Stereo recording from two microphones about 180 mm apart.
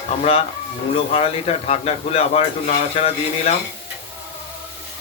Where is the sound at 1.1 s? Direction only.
35° left (ahead or behind).